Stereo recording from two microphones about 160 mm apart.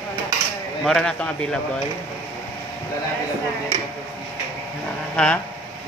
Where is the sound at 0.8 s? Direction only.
5° left (ahead or behind).